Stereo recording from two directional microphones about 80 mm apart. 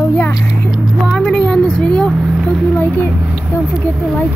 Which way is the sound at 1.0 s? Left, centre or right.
Centre.